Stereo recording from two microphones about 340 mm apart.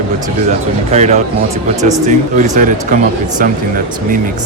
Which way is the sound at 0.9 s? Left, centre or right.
Centre.